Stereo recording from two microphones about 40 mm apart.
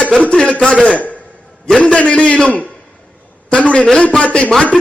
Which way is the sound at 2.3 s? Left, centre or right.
Left.